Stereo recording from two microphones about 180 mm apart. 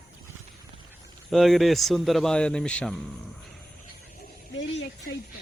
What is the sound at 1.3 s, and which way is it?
Speech, centre (ahead or behind).